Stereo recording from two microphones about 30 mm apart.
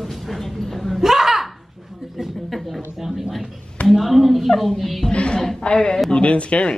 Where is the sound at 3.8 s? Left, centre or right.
Centre.